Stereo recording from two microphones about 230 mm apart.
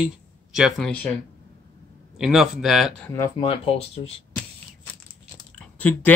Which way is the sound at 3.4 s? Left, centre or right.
Left.